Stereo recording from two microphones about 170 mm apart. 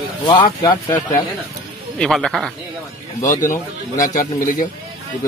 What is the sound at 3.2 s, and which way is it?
Speech, 15° left (ahead or behind).